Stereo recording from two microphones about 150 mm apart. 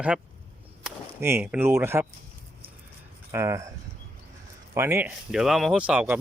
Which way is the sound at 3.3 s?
20° right (ahead or behind).